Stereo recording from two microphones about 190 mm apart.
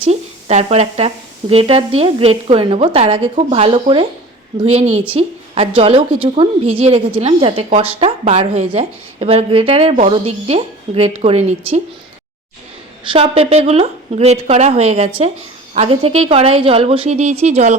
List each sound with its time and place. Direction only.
0.0 s a woman's voice: 35° right (ahead or behind)
13.1 s a woman's voice: 30° right (ahead or behind)